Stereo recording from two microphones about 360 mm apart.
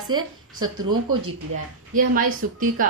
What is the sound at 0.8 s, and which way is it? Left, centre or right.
Speech, right.